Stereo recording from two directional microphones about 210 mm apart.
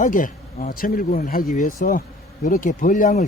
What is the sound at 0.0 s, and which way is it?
Speech, 40° left (ahead or behind).